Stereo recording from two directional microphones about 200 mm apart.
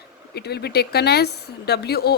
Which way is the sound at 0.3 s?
55° left (ahead or behind).